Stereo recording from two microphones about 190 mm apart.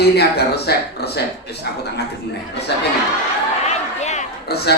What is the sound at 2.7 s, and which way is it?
Speech, 65° left (ahead or behind).